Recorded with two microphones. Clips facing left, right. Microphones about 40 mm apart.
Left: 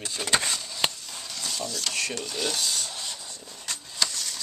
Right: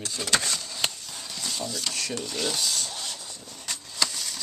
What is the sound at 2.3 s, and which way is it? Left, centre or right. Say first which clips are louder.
Filing: even; centre.